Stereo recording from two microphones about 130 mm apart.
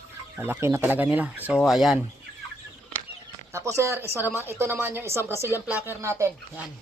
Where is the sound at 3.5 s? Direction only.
20° right (ahead or behind).